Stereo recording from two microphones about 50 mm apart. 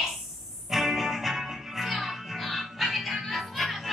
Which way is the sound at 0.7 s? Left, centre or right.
Centre.